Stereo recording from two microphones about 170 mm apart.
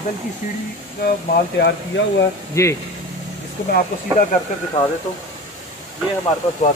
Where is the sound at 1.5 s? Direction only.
90° left.